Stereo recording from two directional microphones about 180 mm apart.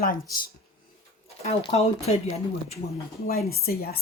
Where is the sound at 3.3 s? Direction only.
60° left (ahead or behind).